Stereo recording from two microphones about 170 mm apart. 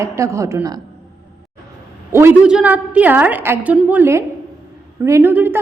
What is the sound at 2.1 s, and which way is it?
A woman's voice, 15° right (ahead or behind).